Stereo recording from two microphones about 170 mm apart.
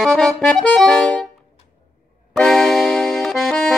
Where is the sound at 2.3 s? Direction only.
5° left (ahead or behind).